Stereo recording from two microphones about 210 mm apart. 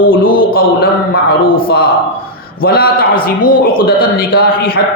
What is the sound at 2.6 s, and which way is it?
A man's voice, 45° left (ahead or behind).